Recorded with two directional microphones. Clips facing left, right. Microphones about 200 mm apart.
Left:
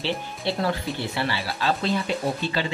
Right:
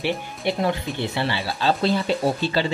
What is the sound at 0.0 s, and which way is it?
Speech, 20° right (ahead or behind).